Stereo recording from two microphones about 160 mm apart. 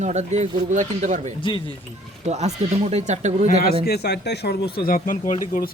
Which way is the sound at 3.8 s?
90° left.